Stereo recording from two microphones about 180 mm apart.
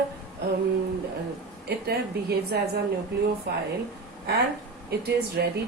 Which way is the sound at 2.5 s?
60° right (ahead or behind).